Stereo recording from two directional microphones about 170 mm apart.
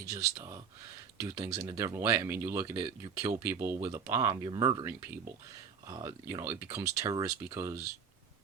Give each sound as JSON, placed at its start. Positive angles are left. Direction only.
{"t": 0.0, "sound": "speech", "side_deg": -20}